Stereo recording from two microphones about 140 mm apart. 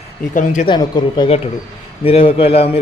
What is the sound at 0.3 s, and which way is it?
Speech, 70° left (ahead or behind).